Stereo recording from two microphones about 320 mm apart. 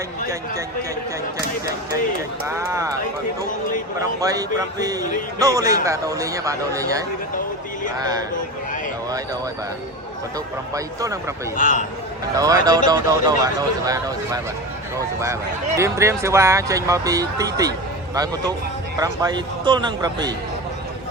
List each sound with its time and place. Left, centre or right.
2.5 s speech: centre
4.2 s speech: centre
10.8 s speech: centre
11.5 s a man's voice: left
12.4 s speech: centre